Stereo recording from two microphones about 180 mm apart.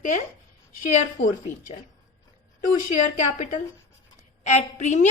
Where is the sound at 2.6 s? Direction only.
45° left (ahead or behind).